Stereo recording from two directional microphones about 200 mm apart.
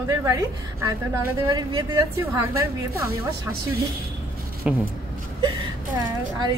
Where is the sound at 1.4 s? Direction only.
20° right (ahead or behind).